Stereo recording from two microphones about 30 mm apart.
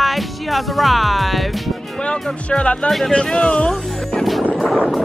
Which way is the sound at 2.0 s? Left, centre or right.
Left.